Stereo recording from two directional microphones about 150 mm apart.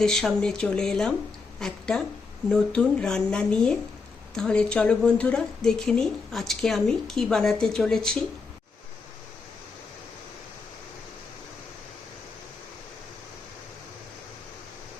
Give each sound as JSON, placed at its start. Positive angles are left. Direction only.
{"t": 0.0, "sound": "a woman's voice", "side_deg": 5}